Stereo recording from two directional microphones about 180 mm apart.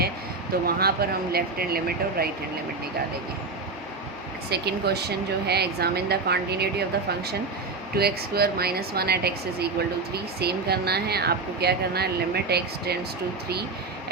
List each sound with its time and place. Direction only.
0.6 s speech: 60° right (ahead or behind)
4.4 s speech: 65° right (ahead or behind)
7.9 s speech: 60° right (ahead or behind)